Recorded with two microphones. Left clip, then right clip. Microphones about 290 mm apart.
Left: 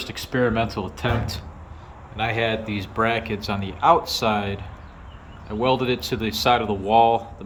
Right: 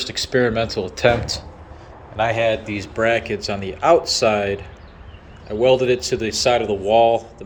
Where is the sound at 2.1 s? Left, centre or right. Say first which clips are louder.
Right 5 dB; centre.